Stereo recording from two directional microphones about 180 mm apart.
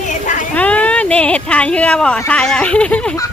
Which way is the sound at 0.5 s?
10° left (ahead or behind).